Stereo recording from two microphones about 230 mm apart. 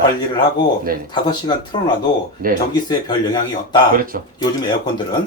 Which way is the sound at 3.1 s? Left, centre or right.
Centre.